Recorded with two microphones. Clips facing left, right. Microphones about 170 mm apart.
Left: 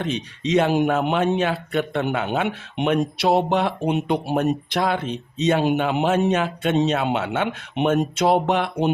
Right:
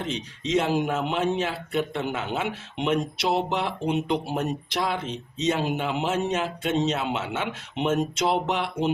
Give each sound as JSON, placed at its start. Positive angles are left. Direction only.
{"t": 0.0, "sound": "speech", "side_deg": 65}